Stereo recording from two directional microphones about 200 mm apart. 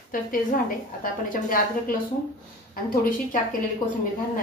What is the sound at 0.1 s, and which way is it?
A woman's voice, 45° left (ahead or behind).